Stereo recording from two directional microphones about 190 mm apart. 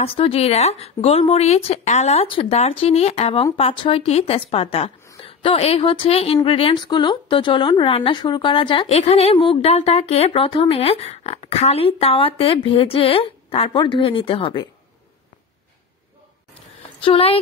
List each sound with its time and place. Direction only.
0.0 s a woman's voice: 30° left (ahead or behind)
17.0 s a woman's voice: 30° left (ahead or behind)